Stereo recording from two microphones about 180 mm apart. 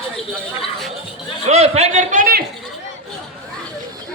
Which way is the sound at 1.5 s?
35° right (ahead or behind).